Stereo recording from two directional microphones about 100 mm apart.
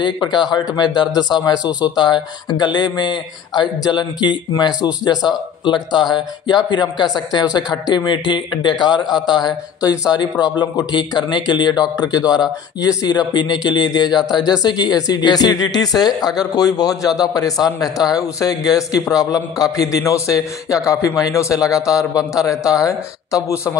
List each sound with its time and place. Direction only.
0.0 s speech: 50° left (ahead or behind)
1.6 s speech: 10° right (ahead or behind)
2.0 s a man's voice: 50° left (ahead or behind); by 23.8 s 30° left (ahead or behind)